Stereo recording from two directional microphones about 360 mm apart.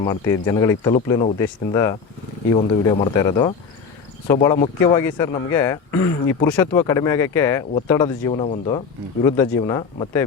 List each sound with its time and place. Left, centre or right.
0.0 s speech: centre